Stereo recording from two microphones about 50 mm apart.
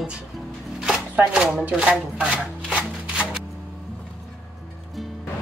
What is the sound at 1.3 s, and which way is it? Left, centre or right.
A woman's voice, centre.